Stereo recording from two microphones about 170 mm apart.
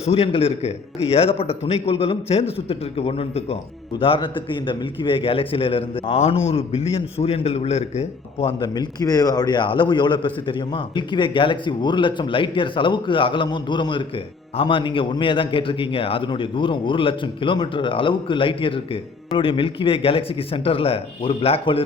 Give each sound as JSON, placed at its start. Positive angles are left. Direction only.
{"t": 0.0, "sound": "a man's voice", "side_deg": 35}